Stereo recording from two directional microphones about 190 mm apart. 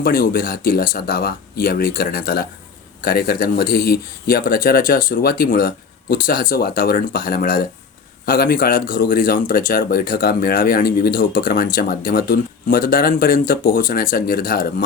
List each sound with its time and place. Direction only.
0.0 s speech: 50° left (ahead or behind)